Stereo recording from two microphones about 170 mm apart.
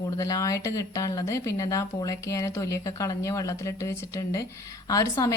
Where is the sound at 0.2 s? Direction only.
20° left (ahead or behind).